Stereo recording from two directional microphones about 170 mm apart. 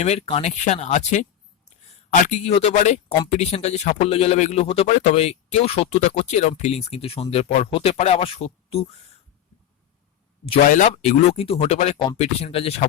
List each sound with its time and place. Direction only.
0.0 s a man's voice: 35° left (ahead or behind)
10.8 s speech: 40° left (ahead or behind)